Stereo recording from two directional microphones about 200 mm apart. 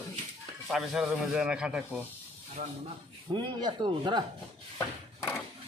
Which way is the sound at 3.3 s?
25° right (ahead or behind).